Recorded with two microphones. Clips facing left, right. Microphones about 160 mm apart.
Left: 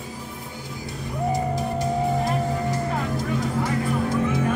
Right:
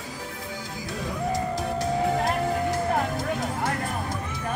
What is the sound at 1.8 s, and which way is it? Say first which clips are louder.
Music: even; 70° right (ahead or behind).